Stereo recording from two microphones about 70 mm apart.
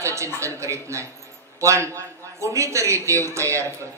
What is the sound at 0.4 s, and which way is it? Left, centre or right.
A man's voice, right.